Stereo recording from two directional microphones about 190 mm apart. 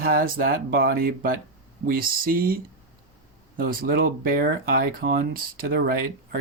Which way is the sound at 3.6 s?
50° right (ahead or behind).